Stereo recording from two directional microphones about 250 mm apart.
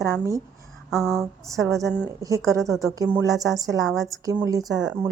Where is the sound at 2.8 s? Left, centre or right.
Centre.